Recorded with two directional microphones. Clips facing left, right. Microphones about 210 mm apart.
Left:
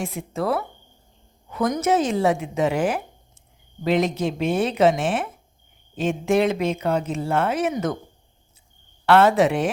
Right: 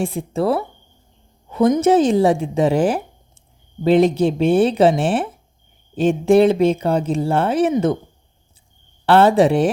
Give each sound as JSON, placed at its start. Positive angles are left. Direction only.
{"t": 0.0, "sound": "speech", "side_deg": -30}
{"t": 9.0, "sound": "speech", "side_deg": -30}